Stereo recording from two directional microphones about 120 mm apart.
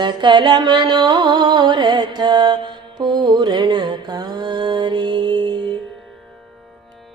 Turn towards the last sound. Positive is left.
turn(degrees=-40)  # may be behind; listen again after turning